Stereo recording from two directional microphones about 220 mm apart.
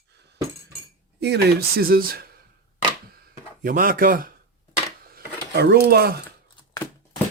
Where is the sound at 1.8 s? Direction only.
40° right (ahead or behind).